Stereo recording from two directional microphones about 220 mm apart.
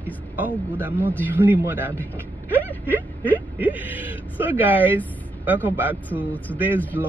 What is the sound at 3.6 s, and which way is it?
Speech, 10° right (ahead or behind).